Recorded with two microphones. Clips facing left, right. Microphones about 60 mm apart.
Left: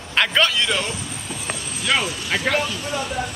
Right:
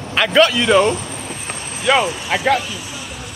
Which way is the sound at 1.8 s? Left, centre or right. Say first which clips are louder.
Right 6 dB; centre.